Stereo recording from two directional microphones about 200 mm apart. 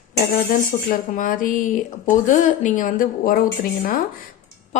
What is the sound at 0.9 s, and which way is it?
A woman's voice, 40° left (ahead or behind).